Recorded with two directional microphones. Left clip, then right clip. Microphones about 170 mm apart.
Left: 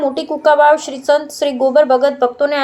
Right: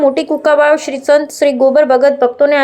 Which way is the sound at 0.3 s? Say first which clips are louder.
Left 4 dB; 20° right (ahead or behind).